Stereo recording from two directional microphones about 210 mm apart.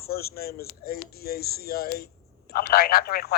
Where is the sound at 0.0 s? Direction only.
45° left (ahead or behind).